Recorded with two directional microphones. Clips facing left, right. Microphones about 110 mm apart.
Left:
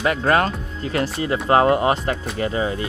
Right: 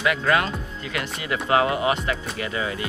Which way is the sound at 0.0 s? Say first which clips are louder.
Left 3 dB; 40° left (ahead or behind).